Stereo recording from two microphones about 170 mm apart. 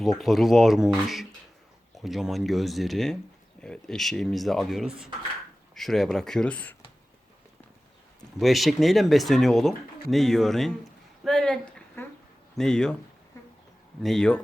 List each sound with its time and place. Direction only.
0.0 s speech: centre (ahead or behind)
8.4 s speech: centre (ahead or behind)
11.2 s a sound: 5° left (ahead or behind)
12.5 s speech: 5° left (ahead or behind)
13.3 s a sound: 15° left (ahead or behind)
14.0 s speech: 5° left (ahead or behind)